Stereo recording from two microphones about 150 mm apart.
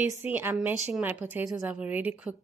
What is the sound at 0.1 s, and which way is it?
A woman's voice, 15° right (ahead or behind).